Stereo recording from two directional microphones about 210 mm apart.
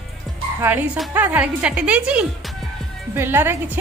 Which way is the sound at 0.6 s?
10° right (ahead or behind).